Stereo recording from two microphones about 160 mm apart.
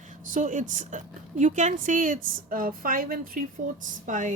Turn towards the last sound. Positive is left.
turn(degrees=-50)  # may be behind; listen again after turning